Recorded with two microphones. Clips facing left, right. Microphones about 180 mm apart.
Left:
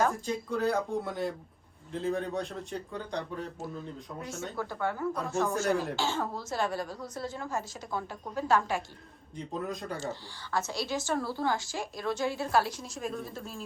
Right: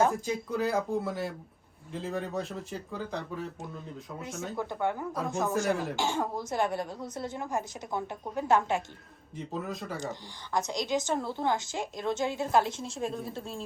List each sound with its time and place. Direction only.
0.3 s speech: centre (ahead or behind)
4.5 s speech: 20° right (ahead or behind)
5.6 s speech: centre (ahead or behind)
6.0 s a woman's voice: 15° right (ahead or behind)
9.3 s speech: 5° right (ahead or behind)
10.0 s a woman's voice: 15° right (ahead or behind)